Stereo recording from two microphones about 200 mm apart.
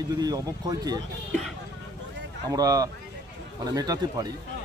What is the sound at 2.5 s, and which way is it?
Speech, 15° right (ahead or behind).